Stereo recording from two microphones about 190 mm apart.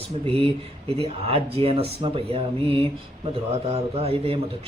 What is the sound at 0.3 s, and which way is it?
Speech, 30° right (ahead or behind).